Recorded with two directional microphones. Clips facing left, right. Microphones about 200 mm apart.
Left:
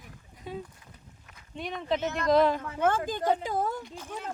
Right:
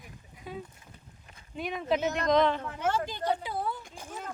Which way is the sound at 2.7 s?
55° left (ahead or behind).